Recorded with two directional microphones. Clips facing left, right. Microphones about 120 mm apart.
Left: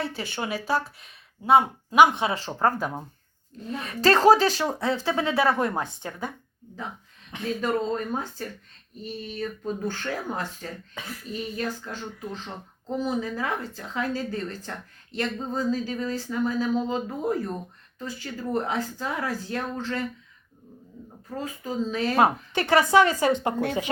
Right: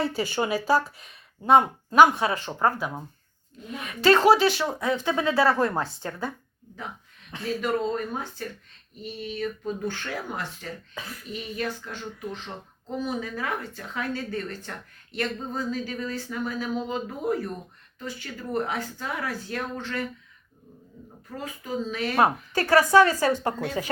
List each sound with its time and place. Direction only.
0.0 s speech: centre (ahead or behind)
1.9 s speech: 20° left (ahead or behind)
2.6 s a woman's voice: 40° left (ahead or behind); by 7.7 s 20° left (ahead or behind)
7.9 s a woman's voice: 35° left (ahead or behind)
9.8 s a woman's voice: 40° left (ahead or behind)
10.9 s a woman's voice: 30° left (ahead or behind)
21.3 s a woman's voice: 30° left (ahead or behind)